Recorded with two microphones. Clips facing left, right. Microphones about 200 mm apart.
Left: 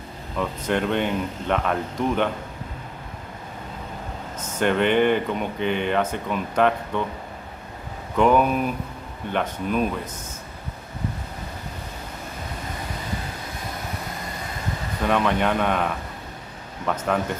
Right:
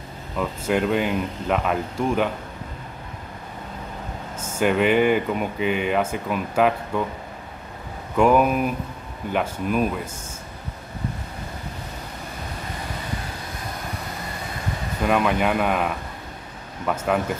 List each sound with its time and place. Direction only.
0.4 s speech: 5° right (ahead or behind)
4.4 s speech: 10° right (ahead or behind)
8.2 s speech: 5° right (ahead or behind)
15.0 s speech: 5° right (ahead or behind)